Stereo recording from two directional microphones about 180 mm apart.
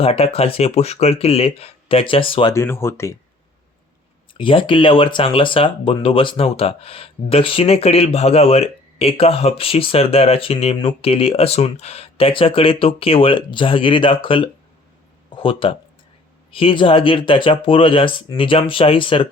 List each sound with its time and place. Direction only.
0.0 s speech: 30° left (ahead or behind)
2.5 s speech: 15° left (ahead or behind)
4.4 s speech: 30° left (ahead or behind)